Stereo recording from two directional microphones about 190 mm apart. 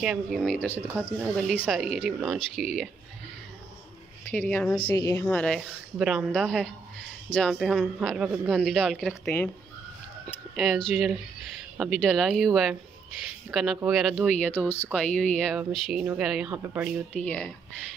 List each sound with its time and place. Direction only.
0.0 s speech: 5° right (ahead or behind)
0.6 s speech: 10° left (ahead or behind)
4.3 s speech: 10° left (ahead or behind)
4.7 s speech: 20° left (ahead or behind)
5.2 s speech: 5° left (ahead or behind)
10.5 s speech: centre (ahead or behind)
13.5 s speech: centre (ahead or behind)
17.1 s speech: 5° left (ahead or behind)